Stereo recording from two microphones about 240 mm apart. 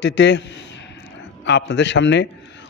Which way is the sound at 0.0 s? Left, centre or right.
Left.